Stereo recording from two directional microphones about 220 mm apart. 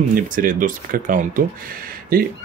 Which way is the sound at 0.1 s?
40° right (ahead or behind).